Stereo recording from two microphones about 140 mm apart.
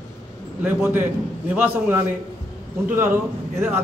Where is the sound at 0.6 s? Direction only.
15° right (ahead or behind).